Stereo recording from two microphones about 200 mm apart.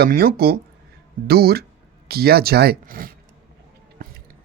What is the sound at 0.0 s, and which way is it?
Speech, 50° right (ahead or behind).